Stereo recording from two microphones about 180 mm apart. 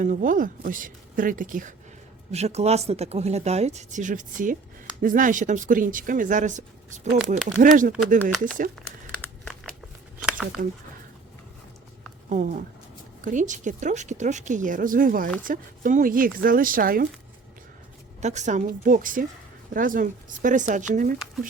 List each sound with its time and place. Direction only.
0.0 s speech: 45° right (ahead or behind)
2.3 s speech: 35° right (ahead or behind)
10.2 s a sound: 5° right (ahead or behind)
12.3 s speech: 45° right (ahead or behind)
18.2 s speech: 40° right (ahead or behind)